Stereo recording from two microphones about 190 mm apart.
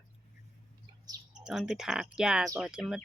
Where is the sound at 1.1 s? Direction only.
20° right (ahead or behind).